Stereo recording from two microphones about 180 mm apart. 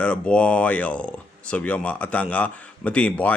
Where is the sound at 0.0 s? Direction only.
5° left (ahead or behind).